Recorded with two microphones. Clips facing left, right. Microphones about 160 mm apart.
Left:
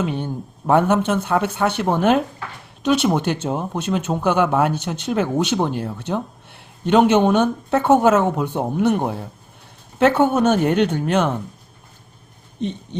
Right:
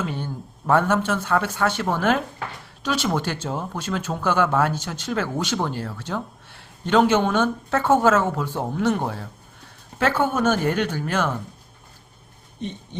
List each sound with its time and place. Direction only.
0.0 s speech: 20° left (ahead or behind)